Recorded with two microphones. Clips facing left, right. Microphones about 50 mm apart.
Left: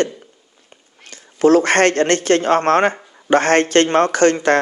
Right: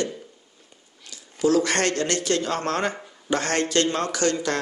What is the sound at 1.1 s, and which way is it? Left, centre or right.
A man's voice, left.